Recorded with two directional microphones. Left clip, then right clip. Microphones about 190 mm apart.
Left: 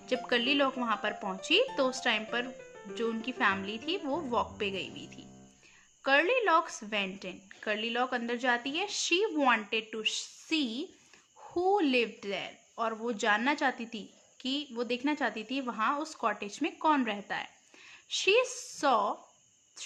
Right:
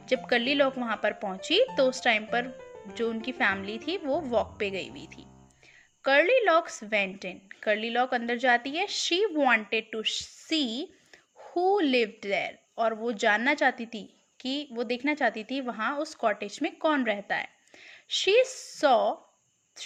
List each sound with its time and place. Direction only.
0.0 s speech: 20° right (ahead or behind)